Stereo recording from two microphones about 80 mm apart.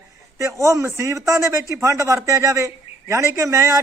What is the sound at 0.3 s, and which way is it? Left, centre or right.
A man's voice, right.